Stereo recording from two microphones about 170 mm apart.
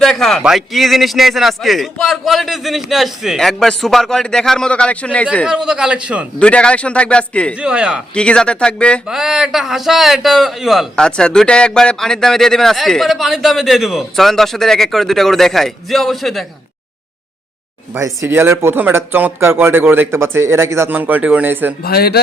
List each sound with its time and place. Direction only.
0.0 s speech: centre (ahead or behind)
5.5 s speech: 5° right (ahead or behind)
6.4 s a man's voice: 5° left (ahead or behind)
7.5 s speech: 5° right (ahead or behind)
8.1 s speech: 5° left (ahead or behind)
17.9 s speech: 15° right (ahead or behind)
21.8 s speech: 65° left (ahead or behind)